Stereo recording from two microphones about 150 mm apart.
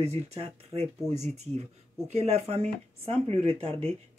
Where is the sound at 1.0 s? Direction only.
20° right (ahead or behind).